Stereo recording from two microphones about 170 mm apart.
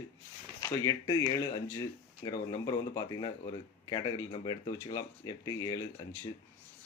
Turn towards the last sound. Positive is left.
turn(degrees=20)  # may be behind; listen again after turning